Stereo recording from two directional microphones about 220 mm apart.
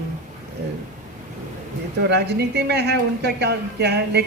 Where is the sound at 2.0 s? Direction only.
50° right (ahead or behind).